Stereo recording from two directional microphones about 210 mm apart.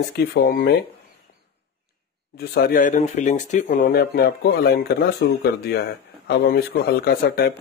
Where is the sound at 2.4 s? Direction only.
50° left (ahead or behind).